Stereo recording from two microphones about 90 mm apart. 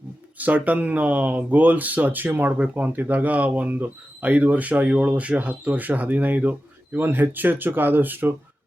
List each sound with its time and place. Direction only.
0.3 s speech: 15° right (ahead or behind)